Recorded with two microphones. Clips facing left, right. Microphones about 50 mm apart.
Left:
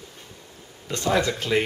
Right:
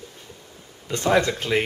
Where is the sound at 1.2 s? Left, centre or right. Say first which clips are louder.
Even; centre.